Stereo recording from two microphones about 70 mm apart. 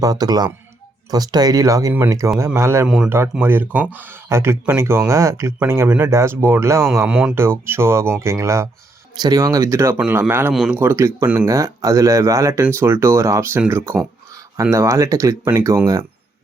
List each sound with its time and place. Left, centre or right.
0.0 s speech: right
2.0 s speech: right
2.8 s speech: centre
3.4 s speech: right
4.3 s speech: right
7.1 s speech: centre
7.3 s speech: right
9.2 s speech: right
10.1 s speech: right
10.9 s speech: right